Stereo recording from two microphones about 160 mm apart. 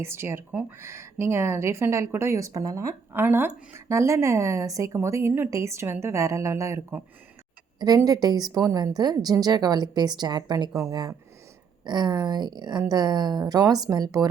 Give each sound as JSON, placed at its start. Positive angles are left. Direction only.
{"t": 0.0, "sound": "a woman's voice", "side_deg": -15}